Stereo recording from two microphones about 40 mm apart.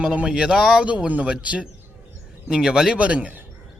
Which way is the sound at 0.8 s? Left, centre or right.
Right.